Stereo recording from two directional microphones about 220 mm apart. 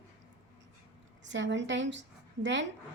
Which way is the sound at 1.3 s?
55° right (ahead or behind).